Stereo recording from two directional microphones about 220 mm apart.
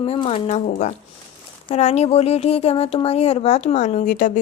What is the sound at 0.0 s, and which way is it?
A woman's voice, 25° left (ahead or behind).